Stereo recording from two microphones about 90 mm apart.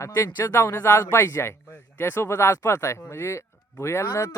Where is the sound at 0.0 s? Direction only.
35° left (ahead or behind).